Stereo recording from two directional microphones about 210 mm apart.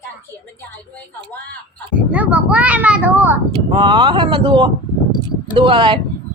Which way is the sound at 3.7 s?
20° right (ahead or behind).